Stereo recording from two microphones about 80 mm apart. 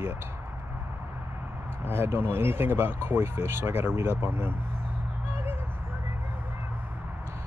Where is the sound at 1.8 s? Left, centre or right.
Right.